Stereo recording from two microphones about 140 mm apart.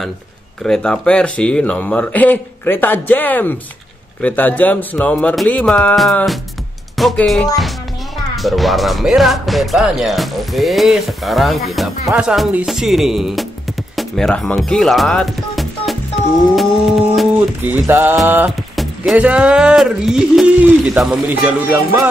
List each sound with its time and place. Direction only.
0.7 s speech: 5° left (ahead or behind)
16.5 s music: centre (ahead or behind)
17.6 s speech: 15° right (ahead or behind)